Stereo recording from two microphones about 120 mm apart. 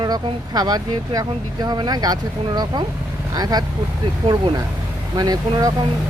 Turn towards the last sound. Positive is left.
turn(degrees=-35)  # may be behind; listen again after turning